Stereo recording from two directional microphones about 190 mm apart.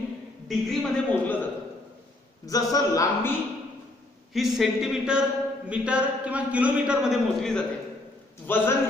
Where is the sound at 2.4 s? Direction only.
20° left (ahead or behind).